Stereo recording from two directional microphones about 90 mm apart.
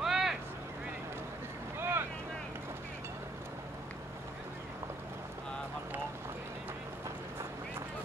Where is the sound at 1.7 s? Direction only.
25° right (ahead or behind).